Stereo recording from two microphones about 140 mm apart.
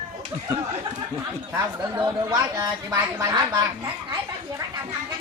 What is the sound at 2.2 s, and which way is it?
Speech, 25° right (ahead or behind).